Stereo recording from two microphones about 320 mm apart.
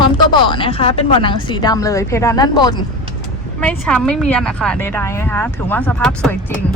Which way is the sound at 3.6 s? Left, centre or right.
Centre.